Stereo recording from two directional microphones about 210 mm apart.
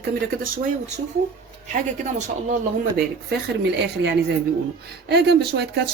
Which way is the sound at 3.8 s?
55° right (ahead or behind).